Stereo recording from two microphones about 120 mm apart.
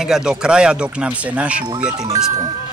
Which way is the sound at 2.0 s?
30° right (ahead or behind).